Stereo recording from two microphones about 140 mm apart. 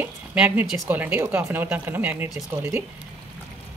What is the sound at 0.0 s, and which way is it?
Speech, 15° right (ahead or behind).